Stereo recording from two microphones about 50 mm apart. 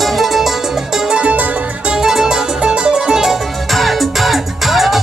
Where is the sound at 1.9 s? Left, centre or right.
Centre.